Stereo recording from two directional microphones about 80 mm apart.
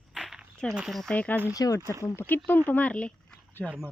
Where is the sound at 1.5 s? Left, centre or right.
Left.